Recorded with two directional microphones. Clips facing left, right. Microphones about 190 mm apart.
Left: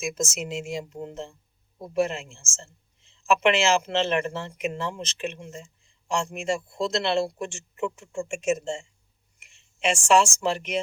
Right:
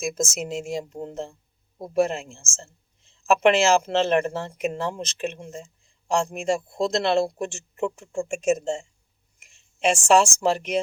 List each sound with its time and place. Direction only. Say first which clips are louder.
0.0 s speech: right 2 dB; 40° right (ahead or behind)